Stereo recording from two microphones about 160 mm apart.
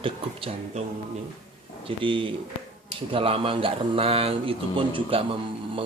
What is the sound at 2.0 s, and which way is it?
Speech, 30° right (ahead or behind).